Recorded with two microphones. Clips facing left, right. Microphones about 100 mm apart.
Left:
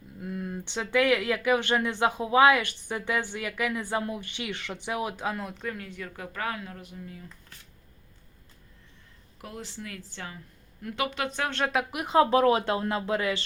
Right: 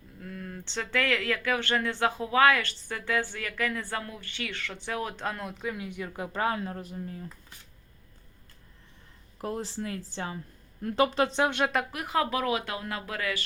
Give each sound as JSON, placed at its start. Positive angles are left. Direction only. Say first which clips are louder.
{"t": 0.2, "sound": "speech", "louder": "left 5 dB", "side_deg": 15}
{"t": 9.4, "sound": "speech", "louder": "right 7 dB", "side_deg": -35}
{"t": 11.6, "sound": "a woman's voice", "louder": "even", "side_deg": 0}
{"t": 11.9, "sound": "speech", "louder": "left 6 dB", "side_deg": 20}